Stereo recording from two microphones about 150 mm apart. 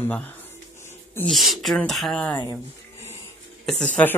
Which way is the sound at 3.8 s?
10° left (ahead or behind).